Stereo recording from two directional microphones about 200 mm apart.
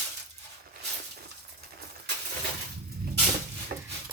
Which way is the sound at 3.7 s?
45° right (ahead or behind).